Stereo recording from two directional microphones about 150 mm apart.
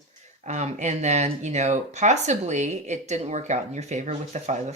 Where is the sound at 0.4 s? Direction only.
50° right (ahead or behind).